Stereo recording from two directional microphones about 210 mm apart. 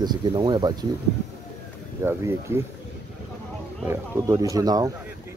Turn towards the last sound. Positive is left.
turn(degrees=-15)  # may be behind; listen again after turning